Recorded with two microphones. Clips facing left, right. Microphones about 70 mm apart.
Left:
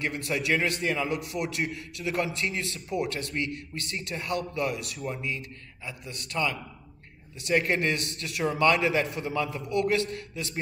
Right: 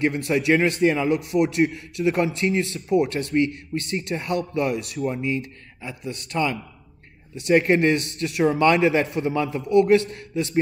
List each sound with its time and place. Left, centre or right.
0.0 s a man's voice: right